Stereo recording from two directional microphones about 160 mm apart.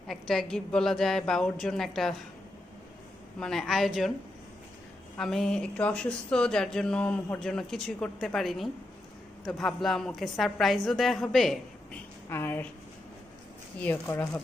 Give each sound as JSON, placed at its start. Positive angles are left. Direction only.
{"t": 0.1, "sound": "speech", "side_deg": 0}
{"t": 3.4, "sound": "speech", "side_deg": 0}
{"t": 5.1, "sound": "a woman's voice", "side_deg": 5}
{"t": 13.8, "sound": "speech", "side_deg": 10}